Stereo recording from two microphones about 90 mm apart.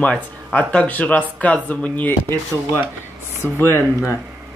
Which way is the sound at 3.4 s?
25° left (ahead or behind).